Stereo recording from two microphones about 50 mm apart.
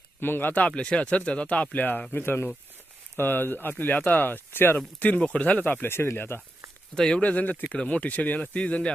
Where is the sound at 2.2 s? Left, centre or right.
Left.